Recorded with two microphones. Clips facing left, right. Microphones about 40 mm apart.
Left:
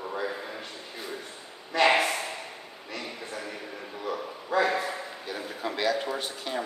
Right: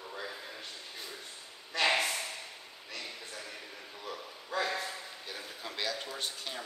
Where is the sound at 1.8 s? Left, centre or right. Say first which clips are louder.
Left 7 dB; left.